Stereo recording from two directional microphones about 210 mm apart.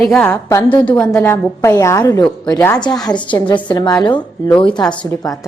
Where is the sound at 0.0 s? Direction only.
5° left (ahead or behind).